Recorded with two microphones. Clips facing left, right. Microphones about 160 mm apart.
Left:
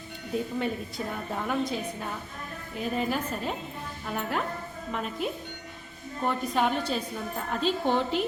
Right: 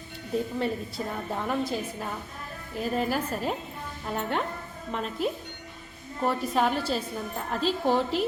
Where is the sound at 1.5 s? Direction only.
5° right (ahead or behind).